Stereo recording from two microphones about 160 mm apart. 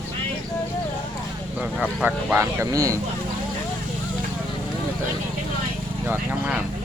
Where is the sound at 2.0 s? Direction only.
10° right (ahead or behind).